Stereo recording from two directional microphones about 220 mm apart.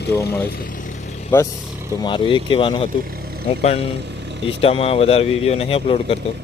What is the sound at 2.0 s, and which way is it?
Speech, 20° left (ahead or behind).